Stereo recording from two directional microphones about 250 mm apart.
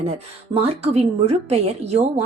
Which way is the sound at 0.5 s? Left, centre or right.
Right.